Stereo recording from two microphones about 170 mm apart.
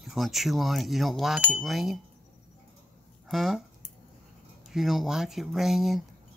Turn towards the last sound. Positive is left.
turn(degrees=0)  # may be behind; listen again after turning